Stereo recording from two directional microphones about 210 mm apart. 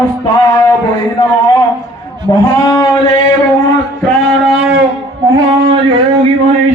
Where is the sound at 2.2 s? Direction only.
15° left (ahead or behind).